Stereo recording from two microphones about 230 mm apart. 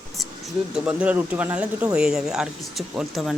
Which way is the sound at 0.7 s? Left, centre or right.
Centre.